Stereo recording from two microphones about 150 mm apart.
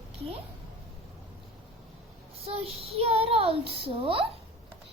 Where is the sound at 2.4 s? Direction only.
40° right (ahead or behind).